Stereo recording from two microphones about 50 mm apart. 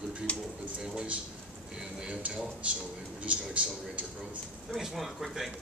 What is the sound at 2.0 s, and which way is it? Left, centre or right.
Speech, centre.